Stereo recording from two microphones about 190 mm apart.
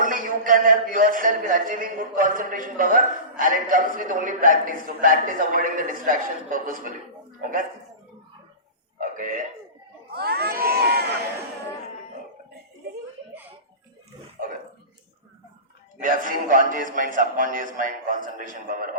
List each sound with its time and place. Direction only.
0.0 s a man's voice: 45° right (ahead or behind)
9.0 s a sound: 45° right (ahead or behind)
10.1 s crowd: 55° right (ahead or behind)
16.0 s a man's voice: 45° right (ahead or behind)